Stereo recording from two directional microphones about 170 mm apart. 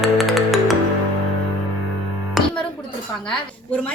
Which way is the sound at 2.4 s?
Centre (ahead or behind).